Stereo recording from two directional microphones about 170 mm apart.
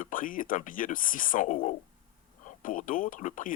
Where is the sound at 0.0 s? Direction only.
55° left (ahead or behind).